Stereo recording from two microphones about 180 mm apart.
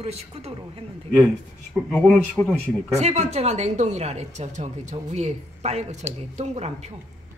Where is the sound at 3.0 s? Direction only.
40° right (ahead or behind).